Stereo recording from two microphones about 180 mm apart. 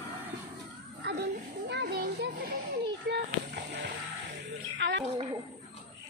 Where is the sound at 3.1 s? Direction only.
70° right (ahead or behind).